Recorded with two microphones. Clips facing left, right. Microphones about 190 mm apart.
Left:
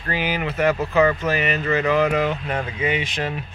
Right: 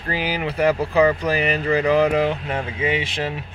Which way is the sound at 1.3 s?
30° right (ahead or behind).